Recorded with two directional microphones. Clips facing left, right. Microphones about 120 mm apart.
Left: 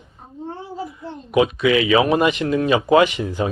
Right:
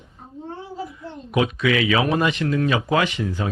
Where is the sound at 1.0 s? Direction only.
10° left (ahead or behind).